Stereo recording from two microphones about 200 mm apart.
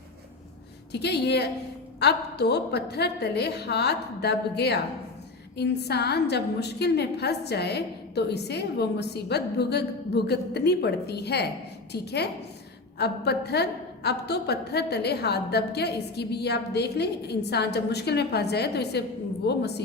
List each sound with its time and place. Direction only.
0.9 s a woman's voice: 55° left (ahead or behind)